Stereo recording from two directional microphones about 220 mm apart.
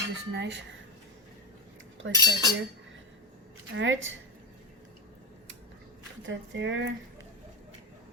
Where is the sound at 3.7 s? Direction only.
60° right (ahead or behind).